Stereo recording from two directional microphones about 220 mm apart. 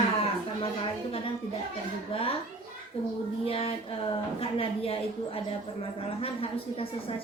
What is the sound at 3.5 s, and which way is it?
A woman's voice, 25° left (ahead or behind).